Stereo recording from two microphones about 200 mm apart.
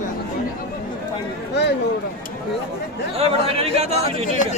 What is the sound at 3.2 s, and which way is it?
Speech, 30° right (ahead or behind).